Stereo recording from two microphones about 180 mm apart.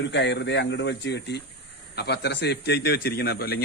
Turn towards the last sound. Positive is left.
turn(degrees=60)  # may be behind; listen again after turning